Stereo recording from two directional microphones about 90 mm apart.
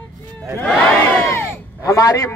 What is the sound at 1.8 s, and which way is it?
Speech, 40° left (ahead or behind).